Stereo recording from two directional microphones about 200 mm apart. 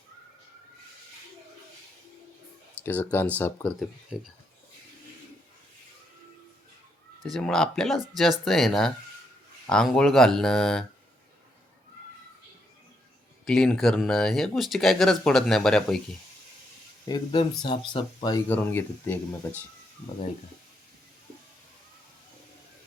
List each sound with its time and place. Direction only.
2.8 s speech: 10° left (ahead or behind)
7.3 s speech: centre (ahead or behind)
13.4 s speech: centre (ahead or behind)
17.6 s speech: 20° left (ahead or behind)
18.4 s speech: 10° left (ahead or behind)